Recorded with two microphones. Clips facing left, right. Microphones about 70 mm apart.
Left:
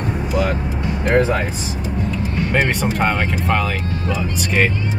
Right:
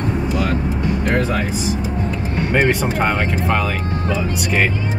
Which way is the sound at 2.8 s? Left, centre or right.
Centre.